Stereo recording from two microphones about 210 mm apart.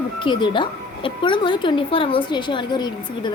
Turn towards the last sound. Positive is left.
turn(degrees=20)  # may be behind; listen again after turning